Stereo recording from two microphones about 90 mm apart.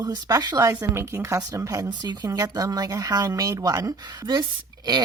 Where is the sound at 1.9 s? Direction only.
55° right (ahead or behind).